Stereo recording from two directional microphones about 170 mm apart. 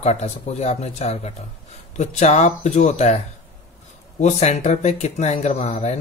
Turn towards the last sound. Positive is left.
turn(degrees=40)  # may be behind; listen again after turning